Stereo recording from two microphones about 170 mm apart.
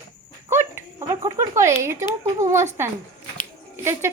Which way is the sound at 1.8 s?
15° right (ahead or behind).